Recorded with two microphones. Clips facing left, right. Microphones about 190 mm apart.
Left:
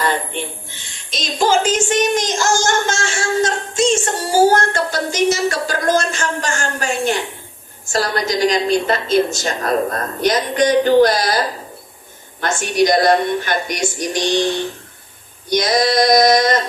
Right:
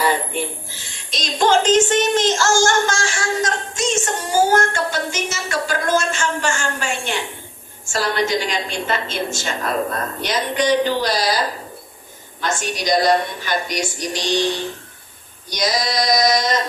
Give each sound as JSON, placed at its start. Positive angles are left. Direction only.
{"t": 0.0, "sound": "a woman's voice", "side_deg": -10}
{"t": 12.4, "sound": "a woman's voice", "side_deg": 55}
{"t": 15.4, "sound": "male singing", "side_deg": 55}